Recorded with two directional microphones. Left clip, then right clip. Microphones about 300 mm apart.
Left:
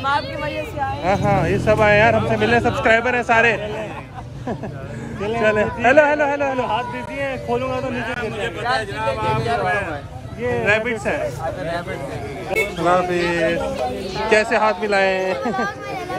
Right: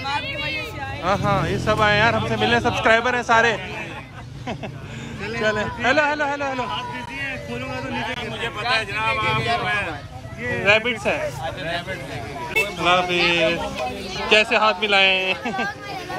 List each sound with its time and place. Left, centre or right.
1.0 s a man's voice: centre
5.4 s a man's voice: centre
10.6 s speech: centre
12.8 s a man's voice: right